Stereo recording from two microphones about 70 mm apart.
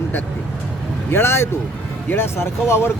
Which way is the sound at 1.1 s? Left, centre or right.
Left.